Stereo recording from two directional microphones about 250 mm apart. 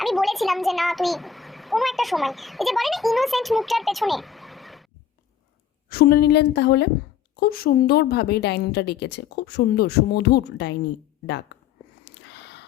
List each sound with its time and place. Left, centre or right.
0.0 s a child's voice: centre
5.9 s speech: left
12.2 s a sound: left